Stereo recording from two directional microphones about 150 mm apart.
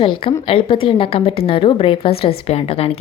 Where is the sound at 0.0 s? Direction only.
35° left (ahead or behind).